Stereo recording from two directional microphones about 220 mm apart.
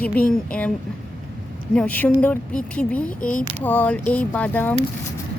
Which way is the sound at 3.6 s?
10° left (ahead or behind).